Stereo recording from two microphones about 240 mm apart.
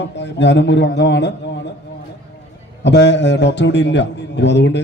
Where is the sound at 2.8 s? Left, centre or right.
Left.